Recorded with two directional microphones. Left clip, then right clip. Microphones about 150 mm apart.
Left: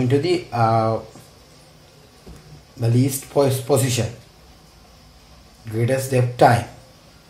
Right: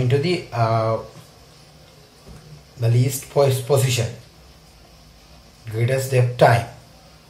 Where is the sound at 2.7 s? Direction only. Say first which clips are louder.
Left 3 dB; 75° left (ahead or behind).